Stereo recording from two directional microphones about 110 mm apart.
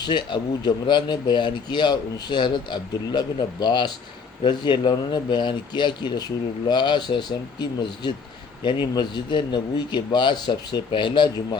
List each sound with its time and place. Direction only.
0.0 s speech: 45° left (ahead or behind)